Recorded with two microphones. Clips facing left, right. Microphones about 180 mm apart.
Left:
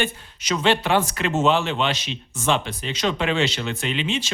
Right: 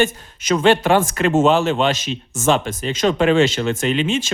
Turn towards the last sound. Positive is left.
turn(degrees=-45)  # may be behind; listen again after turning